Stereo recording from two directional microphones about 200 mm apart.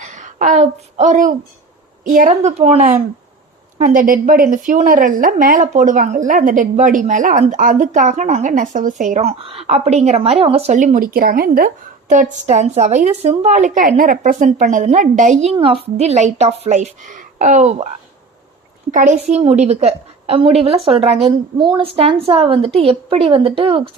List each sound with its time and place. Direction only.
0.0 s a woman's voice: 35° right (ahead or behind)
18.9 s a woman's voice: 40° right (ahead or behind)